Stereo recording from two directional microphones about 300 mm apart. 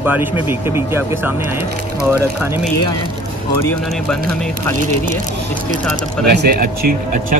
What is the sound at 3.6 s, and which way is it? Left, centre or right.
Speech, centre.